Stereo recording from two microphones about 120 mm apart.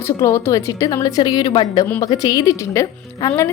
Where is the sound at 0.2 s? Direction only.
20° left (ahead or behind).